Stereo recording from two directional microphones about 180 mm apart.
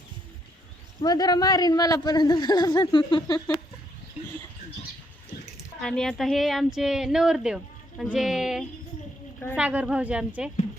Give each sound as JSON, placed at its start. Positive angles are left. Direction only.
{"t": 1.0, "sound": "speech", "side_deg": 20}
{"t": 5.8, "sound": "a woman's voice", "side_deg": 5}